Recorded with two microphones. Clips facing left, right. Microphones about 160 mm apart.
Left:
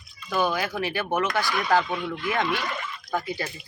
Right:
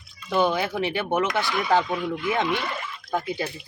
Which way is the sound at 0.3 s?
25° right (ahead or behind).